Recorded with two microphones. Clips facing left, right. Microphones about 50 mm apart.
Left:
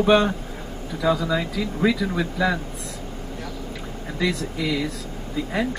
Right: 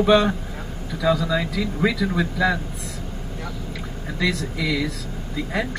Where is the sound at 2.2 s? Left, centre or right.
Centre.